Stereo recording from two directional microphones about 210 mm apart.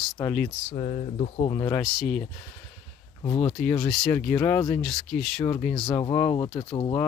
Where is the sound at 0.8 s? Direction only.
30° left (ahead or behind).